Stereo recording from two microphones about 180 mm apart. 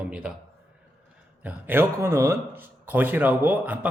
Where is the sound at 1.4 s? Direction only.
10° right (ahead or behind).